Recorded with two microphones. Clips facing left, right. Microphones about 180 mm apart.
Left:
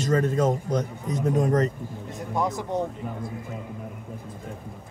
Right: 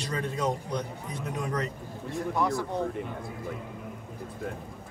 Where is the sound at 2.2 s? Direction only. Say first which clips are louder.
Even; 20° left (ahead or behind).